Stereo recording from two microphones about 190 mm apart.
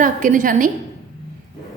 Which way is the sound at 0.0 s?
45° right (ahead or behind).